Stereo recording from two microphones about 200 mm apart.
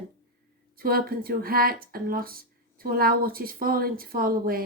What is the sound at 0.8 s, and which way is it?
Speech, 45° right (ahead or behind).